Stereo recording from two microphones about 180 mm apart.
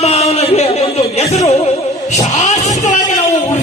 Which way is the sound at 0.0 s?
35° left (ahead or behind).